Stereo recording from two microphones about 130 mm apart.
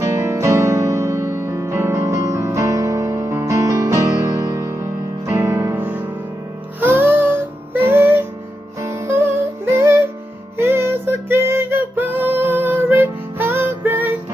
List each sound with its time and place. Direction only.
0.0 s music: 20° right (ahead or behind)